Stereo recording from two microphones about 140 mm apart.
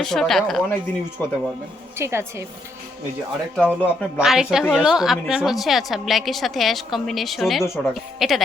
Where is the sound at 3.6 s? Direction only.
10° left (ahead or behind).